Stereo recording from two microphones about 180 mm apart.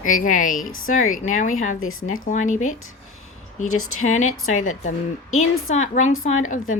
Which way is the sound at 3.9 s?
45° left (ahead or behind).